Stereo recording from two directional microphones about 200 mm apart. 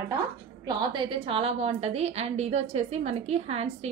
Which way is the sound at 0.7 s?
20° right (ahead or behind).